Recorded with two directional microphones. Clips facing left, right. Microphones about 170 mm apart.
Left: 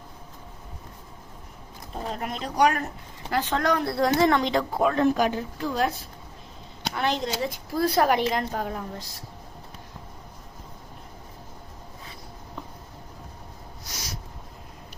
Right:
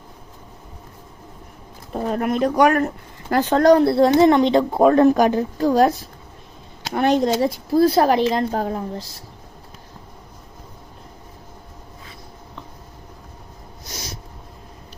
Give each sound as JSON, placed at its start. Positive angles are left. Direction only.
{"t": 1.9, "sound": "speech", "side_deg": -60}
{"t": 3.2, "sound": "speech", "side_deg": -45}
{"t": 4.8, "sound": "a woman's voice", "side_deg": -45}
{"t": 6.9, "sound": "speech", "side_deg": -50}
{"t": 7.7, "sound": "a woman's voice", "side_deg": -30}